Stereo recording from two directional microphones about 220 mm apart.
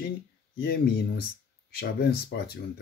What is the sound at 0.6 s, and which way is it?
Speech, 45° left (ahead or behind).